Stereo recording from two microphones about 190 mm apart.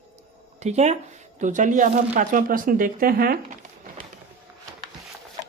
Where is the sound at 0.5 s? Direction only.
35° right (ahead or behind).